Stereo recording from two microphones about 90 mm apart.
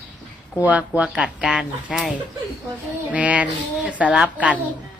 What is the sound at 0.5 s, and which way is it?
A woman's voice, 15° right (ahead or behind).